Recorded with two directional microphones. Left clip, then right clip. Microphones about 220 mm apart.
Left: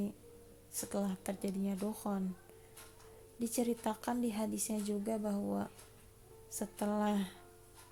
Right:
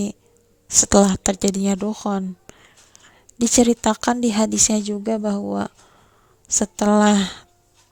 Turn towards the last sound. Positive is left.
turn(degrees=-50)  # may be behind; listen again after turning